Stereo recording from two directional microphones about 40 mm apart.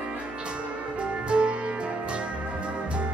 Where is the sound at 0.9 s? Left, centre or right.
Right.